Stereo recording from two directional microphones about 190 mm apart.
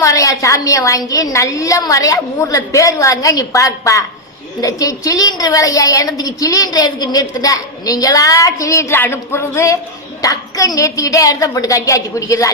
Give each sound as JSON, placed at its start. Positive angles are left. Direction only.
{"t": 0.0, "sound": "a woman's voice", "side_deg": 15}